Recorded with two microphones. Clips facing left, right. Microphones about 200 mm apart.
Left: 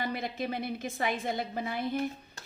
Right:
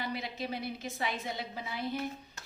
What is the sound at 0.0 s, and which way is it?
A woman's voice, 50° left (ahead or behind).